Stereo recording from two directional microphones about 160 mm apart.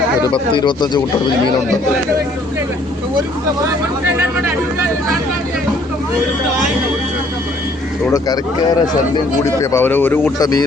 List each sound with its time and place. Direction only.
0.2 s speech: 25° left (ahead or behind)
9.4 s speech: 15° left (ahead or behind)